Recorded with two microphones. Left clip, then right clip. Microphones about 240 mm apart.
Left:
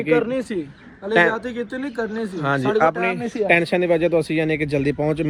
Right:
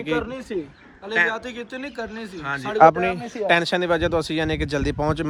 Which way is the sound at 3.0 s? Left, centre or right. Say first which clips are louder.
Left 2 dB; right.